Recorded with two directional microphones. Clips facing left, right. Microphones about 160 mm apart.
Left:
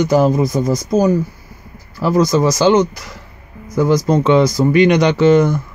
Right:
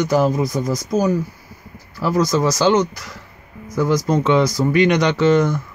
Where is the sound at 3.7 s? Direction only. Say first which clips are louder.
Left 4 dB; 25° left (ahead or behind).